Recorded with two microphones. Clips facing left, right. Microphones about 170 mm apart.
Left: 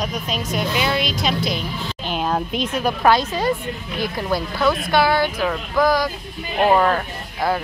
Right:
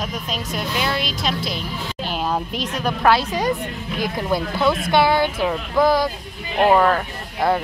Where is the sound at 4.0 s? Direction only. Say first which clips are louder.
Right 1 dB; 20° right (ahead or behind).